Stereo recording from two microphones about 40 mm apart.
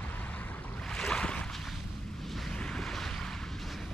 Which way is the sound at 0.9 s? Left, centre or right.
Centre.